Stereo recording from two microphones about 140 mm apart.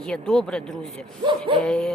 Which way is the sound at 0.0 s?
5° left (ahead or behind).